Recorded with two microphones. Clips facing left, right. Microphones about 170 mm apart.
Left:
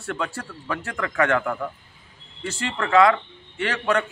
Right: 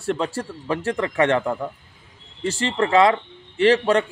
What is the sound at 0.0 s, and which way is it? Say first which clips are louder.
Speech: right 5 dB; 30° right (ahead or behind).